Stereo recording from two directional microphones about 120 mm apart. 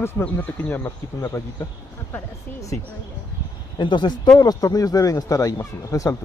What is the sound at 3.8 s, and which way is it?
Speech, 40° left (ahead or behind).